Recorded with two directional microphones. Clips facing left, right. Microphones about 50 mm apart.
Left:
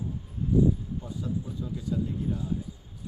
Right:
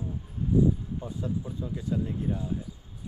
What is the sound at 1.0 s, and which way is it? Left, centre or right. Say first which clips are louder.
Speech: right 1 dB; right.